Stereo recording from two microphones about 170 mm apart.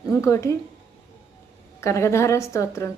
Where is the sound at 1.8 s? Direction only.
15° left (ahead or behind).